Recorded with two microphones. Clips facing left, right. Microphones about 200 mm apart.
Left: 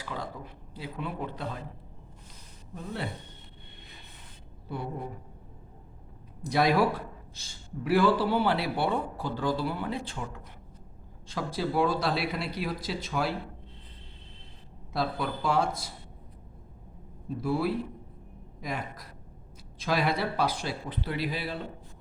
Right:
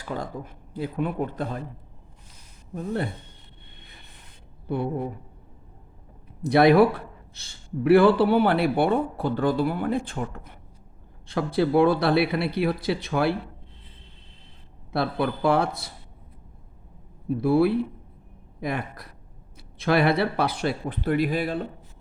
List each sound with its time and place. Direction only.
0.0 s speech: 45° right (ahead or behind)
2.7 s speech: 50° right (ahead or behind)
6.4 s a man's voice: 60° right (ahead or behind)
14.9 s a man's voice: 60° right (ahead or behind)
17.2 s a man's voice: 65° right (ahead or behind)